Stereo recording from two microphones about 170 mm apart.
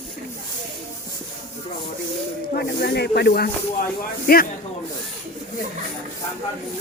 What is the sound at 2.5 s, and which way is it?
Speech, 70° left (ahead or behind).